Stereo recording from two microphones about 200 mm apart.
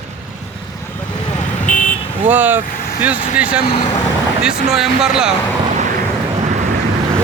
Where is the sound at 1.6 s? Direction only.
5° left (ahead or behind).